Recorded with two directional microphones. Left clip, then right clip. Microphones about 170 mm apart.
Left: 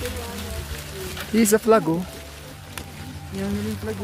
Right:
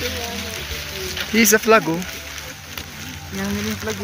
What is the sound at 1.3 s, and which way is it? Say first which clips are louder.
Speech: right 3 dB; 25° left (ahead or behind).